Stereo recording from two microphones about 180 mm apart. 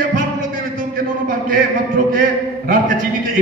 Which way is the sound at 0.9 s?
50° right (ahead or behind).